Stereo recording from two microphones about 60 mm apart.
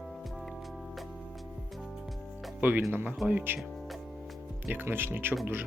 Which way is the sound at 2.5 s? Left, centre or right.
Right.